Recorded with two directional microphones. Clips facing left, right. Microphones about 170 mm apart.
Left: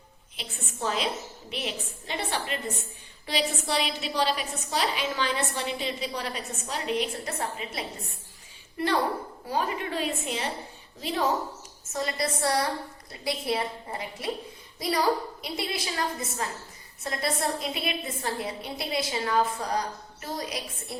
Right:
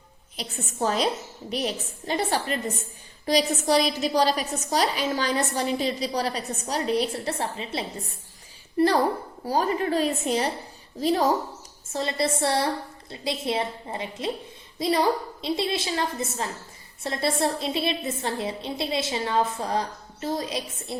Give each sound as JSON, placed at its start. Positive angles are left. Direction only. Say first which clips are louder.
{"t": 0.3, "sound": "a woman's voice", "louder": "right 7 dB", "side_deg": -40}
{"t": 11.9, "sound": "a woman's voice", "louder": "right 4 dB", "side_deg": -25}